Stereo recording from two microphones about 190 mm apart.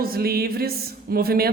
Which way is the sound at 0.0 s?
50° right (ahead or behind).